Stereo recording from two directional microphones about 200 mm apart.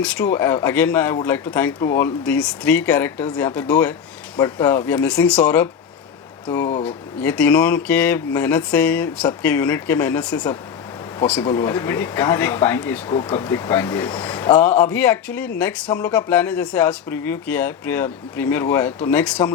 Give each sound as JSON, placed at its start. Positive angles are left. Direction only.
{"t": 0.0, "sound": "speech", "side_deg": 5}
{"t": 4.4, "sound": "speech", "side_deg": 20}
{"t": 4.9, "sound": "speech", "side_deg": 5}
{"t": 6.8, "sound": "speech", "side_deg": 5}